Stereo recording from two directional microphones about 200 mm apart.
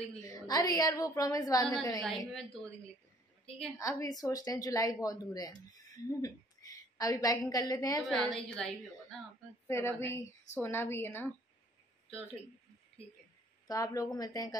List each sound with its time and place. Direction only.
0.2 s speech: 15° left (ahead or behind)
2.0 s a woman's voice: centre (ahead or behind)
3.7 s speech: 15° left (ahead or behind)
8.0 s a woman's voice: centre (ahead or behind)
13.7 s speech: 20° left (ahead or behind)